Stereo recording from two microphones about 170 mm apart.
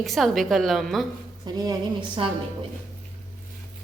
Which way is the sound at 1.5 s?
25° right (ahead or behind).